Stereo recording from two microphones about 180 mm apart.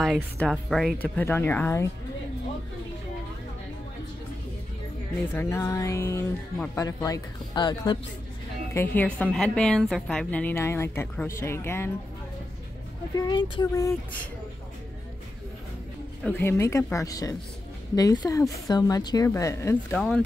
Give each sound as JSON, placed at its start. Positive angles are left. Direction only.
{"t": 0.0, "sound": "a woman's voice", "side_deg": 0}
{"t": 5.3, "sound": "a woman's voice", "side_deg": 15}
{"t": 8.7, "sound": "a woman's voice", "side_deg": 10}
{"t": 13.1, "sound": "speech", "side_deg": 20}
{"t": 16.3, "sound": "a woman's voice", "side_deg": 10}